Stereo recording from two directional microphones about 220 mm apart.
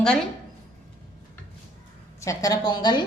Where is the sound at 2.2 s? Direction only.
15° left (ahead or behind).